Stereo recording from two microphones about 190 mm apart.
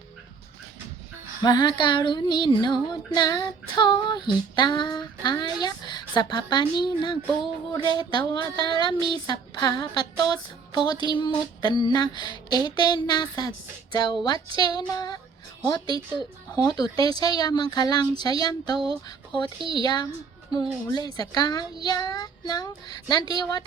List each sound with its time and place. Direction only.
1.4 s female singing: 20° left (ahead or behind)
9.2 s a woman's voice: 20° left (ahead or behind)
10.8 s female singing: 25° left (ahead or behind)
19.0 s speech: 25° left (ahead or behind)
19.7 s female singing: 20° left (ahead or behind)